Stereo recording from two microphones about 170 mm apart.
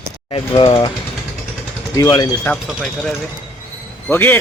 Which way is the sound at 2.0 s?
25° left (ahead or behind).